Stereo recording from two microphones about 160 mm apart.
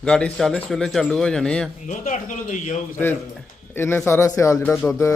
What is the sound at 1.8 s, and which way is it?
Speech, 50° left (ahead or behind).